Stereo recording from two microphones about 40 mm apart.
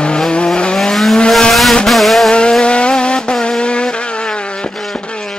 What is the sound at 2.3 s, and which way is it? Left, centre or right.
Vehicle, left.